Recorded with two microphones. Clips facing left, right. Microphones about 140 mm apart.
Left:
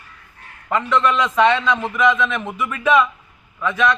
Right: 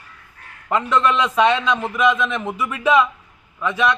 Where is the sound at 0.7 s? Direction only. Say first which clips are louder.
Even; 15° right (ahead or behind).